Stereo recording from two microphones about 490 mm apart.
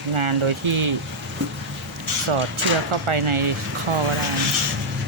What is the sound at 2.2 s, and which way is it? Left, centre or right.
Speech, right.